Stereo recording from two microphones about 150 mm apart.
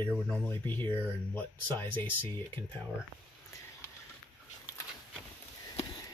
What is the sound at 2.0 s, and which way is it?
Speech, 10° left (ahead or behind).